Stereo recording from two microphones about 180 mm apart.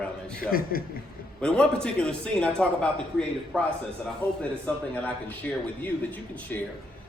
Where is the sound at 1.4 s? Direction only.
5° left (ahead or behind).